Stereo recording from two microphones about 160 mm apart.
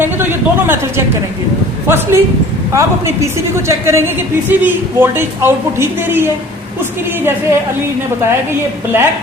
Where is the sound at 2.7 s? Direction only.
20° right (ahead or behind).